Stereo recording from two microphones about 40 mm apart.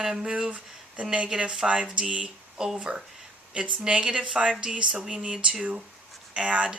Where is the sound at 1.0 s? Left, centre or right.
Right.